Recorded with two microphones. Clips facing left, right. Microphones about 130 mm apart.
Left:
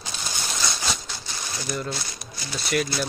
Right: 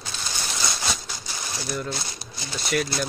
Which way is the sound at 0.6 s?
5° right (ahead or behind).